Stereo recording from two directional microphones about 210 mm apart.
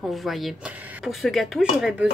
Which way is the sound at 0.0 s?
Centre (ahead or behind).